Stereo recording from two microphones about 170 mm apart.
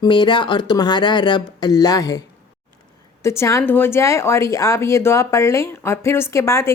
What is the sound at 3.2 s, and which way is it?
A woman's voice, 15° left (ahead or behind).